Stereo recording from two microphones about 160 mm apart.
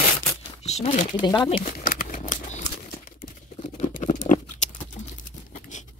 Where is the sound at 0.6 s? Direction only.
45° left (ahead or behind).